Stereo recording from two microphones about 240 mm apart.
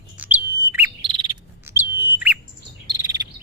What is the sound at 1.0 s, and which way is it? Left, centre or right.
Bird, centre.